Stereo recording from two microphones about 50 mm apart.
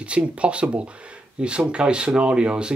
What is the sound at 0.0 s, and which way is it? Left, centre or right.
Speech, right.